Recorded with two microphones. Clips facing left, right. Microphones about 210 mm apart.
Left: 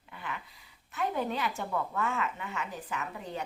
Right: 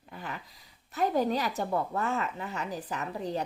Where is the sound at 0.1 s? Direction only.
40° right (ahead or behind).